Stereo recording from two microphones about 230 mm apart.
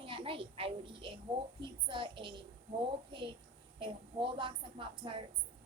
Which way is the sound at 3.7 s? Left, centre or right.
Right.